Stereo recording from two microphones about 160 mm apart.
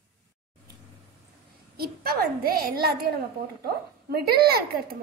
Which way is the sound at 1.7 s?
75° right (ahead or behind).